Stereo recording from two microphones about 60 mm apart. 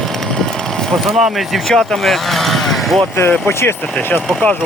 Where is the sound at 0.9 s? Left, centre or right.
Centre.